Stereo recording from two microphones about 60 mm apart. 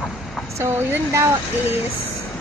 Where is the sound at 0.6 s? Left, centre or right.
Right.